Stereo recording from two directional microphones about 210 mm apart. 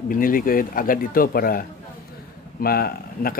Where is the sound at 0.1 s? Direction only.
40° left (ahead or behind).